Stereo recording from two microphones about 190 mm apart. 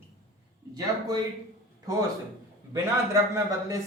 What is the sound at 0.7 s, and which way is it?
Speech, 20° right (ahead or behind).